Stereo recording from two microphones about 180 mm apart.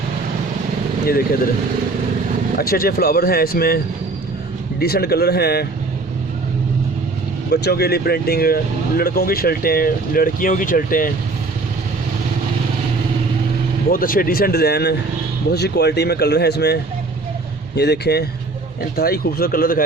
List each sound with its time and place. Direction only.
2.6 s speech: 55° left (ahead or behind)
4.8 s speech: 60° left (ahead or behind)
7.5 s speech: 65° left (ahead or behind)
13.9 s speech: 50° left (ahead or behind)
17.7 s speech: 65° left (ahead or behind)